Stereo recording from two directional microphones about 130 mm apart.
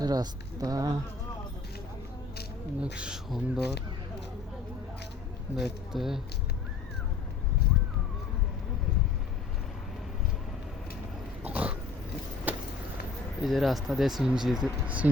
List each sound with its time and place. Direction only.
0.0 s speech: 30° right (ahead or behind)
2.8 s speech: 5° right (ahead or behind)
5.5 s speech: 5° right (ahead or behind)
11.4 s pig: 10° right (ahead or behind)
13.4 s speech: centre (ahead or behind)